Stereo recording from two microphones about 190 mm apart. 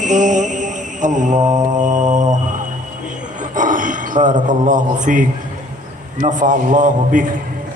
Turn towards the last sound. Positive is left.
turn(degrees=-45)  # may be behind; listen again after turning